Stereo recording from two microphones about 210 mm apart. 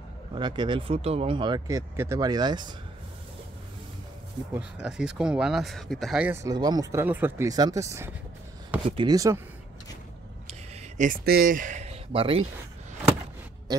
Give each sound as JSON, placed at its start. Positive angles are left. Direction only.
{"t": 0.3, "sound": "speech", "side_deg": -20}
{"t": 4.6, "sound": "speech", "side_deg": -5}
{"t": 11.0, "sound": "speech", "side_deg": -45}